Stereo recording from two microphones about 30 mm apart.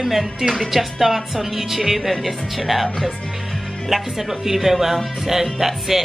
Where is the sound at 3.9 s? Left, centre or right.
Centre.